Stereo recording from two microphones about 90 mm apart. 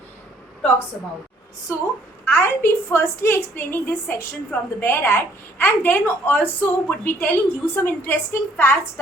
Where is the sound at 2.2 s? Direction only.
30° left (ahead or behind).